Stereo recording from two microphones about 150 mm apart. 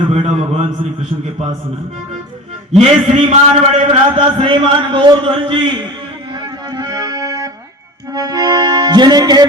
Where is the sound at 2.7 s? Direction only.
45° right (ahead or behind).